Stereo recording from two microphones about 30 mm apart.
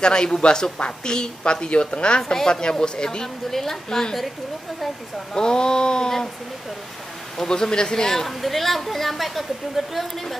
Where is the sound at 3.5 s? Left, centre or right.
Centre.